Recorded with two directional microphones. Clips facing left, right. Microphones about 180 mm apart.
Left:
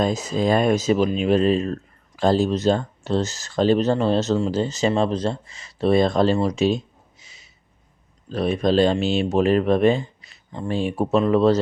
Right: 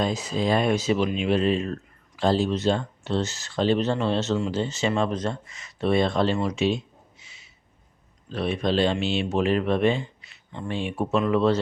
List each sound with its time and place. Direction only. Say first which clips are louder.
0.0 s speech: left 4 dB; 45° left (ahead or behind)